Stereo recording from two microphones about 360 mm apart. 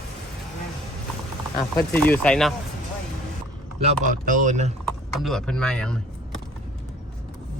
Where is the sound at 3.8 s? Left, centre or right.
Right.